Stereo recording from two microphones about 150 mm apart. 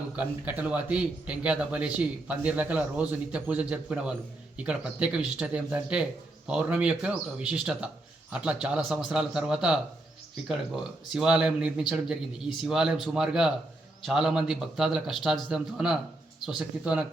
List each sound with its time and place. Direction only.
0.2 s a man's voice: 10° right (ahead or behind)
11.1 s a man's voice: 5° right (ahead or behind)